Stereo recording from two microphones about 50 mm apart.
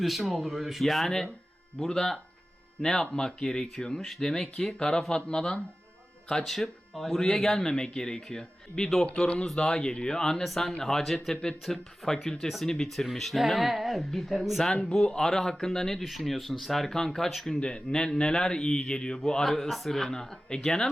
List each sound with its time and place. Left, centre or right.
0.0 s speech: centre
6.4 s speech: centre
7.2 s speech: centre
14.6 s speech: centre
17.6 s speech: centre